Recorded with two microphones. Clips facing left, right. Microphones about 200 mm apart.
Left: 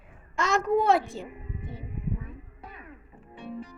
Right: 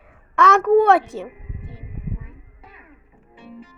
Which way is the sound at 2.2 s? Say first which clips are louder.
Left 2 dB; centre (ahead or behind).